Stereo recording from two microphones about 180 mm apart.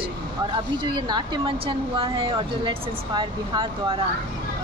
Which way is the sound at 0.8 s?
25° right (ahead or behind).